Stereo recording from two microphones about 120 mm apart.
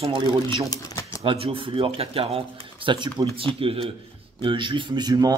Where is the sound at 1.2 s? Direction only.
50° right (ahead or behind).